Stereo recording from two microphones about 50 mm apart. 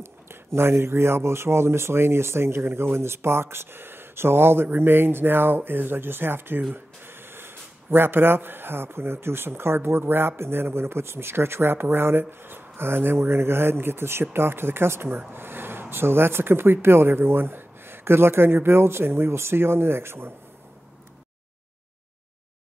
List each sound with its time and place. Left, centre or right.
0.0 s speech: right